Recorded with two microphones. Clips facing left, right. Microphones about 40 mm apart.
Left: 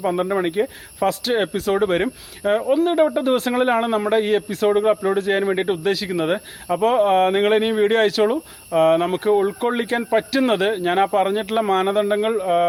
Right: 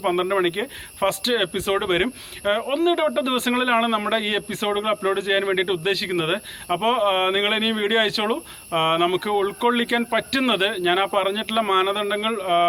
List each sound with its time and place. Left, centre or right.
0.0 s a man's voice: right